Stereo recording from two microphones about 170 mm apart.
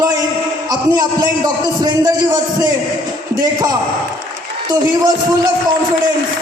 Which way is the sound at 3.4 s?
25° right (ahead or behind).